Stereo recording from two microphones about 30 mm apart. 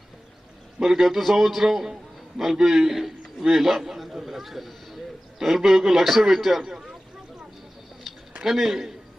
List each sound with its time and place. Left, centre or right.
0.8 s a man's voice: right
1.0 s a man's voice: centre
6.7 s speech: right
8.6 s a man's voice: centre